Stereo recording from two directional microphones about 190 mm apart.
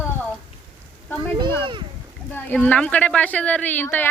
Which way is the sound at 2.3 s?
10° left (ahead or behind).